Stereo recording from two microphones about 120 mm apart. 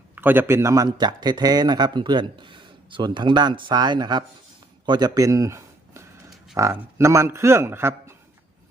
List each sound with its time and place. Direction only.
0.2 s speech: 15° right (ahead or behind)
0.9 s a man's voice: 35° right (ahead or behind); by 8.1 s 20° right (ahead or behind)